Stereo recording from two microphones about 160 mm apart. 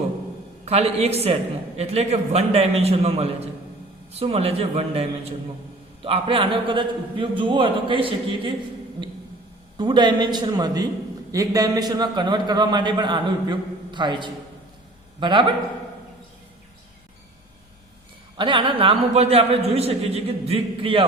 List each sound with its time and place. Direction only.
0.6 s a man's voice: 40° right (ahead or behind)
9.7 s a man's voice: 25° right (ahead or behind)
18.3 s a man's voice: 30° right (ahead or behind)